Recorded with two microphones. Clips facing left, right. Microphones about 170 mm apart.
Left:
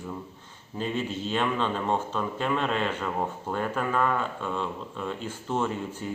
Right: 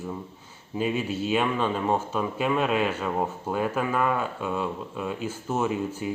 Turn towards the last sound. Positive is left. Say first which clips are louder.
# right 3 dB
turn(degrees=-10)  # may be behind; listen again after turning